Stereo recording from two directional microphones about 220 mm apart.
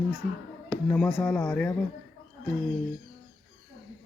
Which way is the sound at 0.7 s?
5° left (ahead or behind).